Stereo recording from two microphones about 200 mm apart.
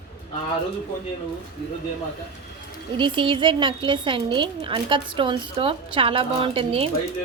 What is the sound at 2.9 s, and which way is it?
A woman's voice, 25° right (ahead or behind).